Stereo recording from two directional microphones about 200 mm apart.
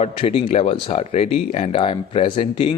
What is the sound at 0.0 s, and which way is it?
Speech, 30° left (ahead or behind).